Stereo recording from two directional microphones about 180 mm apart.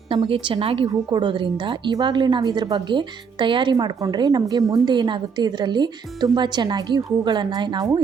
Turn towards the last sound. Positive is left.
turn(degrees=-25)  # may be behind; listen again after turning